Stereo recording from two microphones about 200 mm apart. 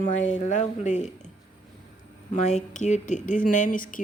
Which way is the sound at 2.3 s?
35° left (ahead or behind).